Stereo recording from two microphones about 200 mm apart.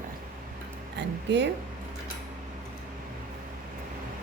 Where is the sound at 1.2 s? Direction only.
60° right (ahead or behind).